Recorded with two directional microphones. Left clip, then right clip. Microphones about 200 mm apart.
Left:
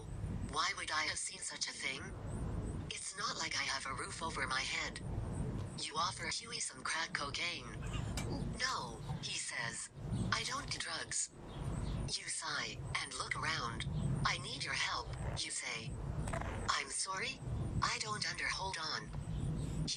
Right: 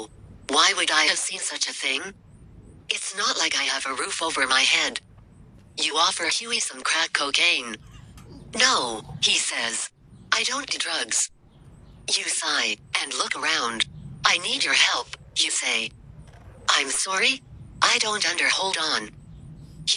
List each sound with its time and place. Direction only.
0.4 s speech: 55° right (ahead or behind)